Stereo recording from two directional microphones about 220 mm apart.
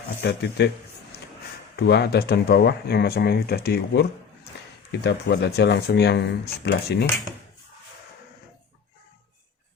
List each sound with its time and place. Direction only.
0.2 s speech: 50° left (ahead or behind)
1.7 s speech: 50° left (ahead or behind)